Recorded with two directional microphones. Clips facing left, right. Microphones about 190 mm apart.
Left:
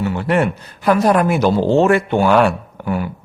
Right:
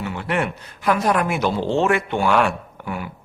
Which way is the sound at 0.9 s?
40° left (ahead or behind).